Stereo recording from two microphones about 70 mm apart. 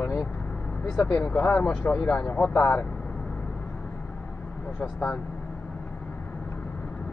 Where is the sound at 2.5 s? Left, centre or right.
Left.